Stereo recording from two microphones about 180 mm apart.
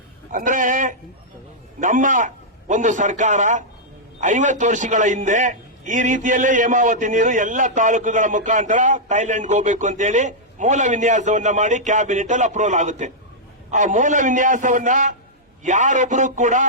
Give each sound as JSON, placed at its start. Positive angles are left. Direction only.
{"t": 0.3, "sound": "a man's voice", "side_deg": -50}